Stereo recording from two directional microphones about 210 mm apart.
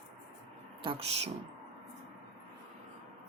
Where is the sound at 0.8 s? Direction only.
25° right (ahead or behind).